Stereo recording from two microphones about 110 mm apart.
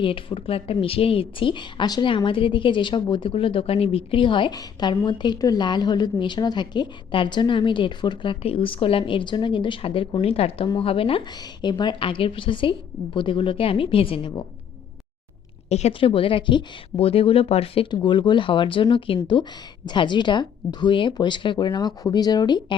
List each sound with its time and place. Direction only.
0.0 s speech: 50° left (ahead or behind)
11.3 s speech: 40° left (ahead or behind)
15.9 s speech: 55° left (ahead or behind)
18.0 s speech: 45° left (ahead or behind)